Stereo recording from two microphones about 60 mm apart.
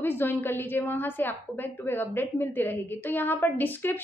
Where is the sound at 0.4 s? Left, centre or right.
Left.